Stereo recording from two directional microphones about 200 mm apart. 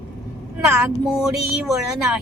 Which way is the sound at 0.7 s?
Centre (ahead or behind).